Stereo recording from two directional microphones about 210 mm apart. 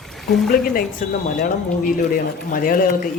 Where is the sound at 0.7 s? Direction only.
40° left (ahead or behind).